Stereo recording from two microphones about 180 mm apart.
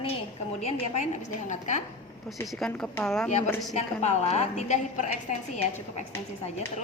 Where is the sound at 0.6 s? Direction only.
40° left (ahead or behind).